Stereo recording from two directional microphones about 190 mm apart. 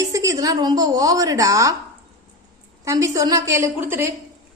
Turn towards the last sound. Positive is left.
turn(degrees=-10)  # may be behind; listen again after turning